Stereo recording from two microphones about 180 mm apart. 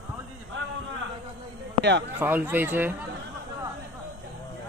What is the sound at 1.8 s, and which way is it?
Speech, 80° right.